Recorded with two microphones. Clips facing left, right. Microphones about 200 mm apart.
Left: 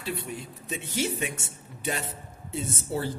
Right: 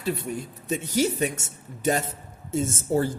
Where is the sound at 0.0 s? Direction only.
45° right (ahead or behind).